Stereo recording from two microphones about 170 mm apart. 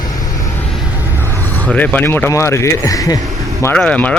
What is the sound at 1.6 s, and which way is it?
Speech, 10° left (ahead or behind).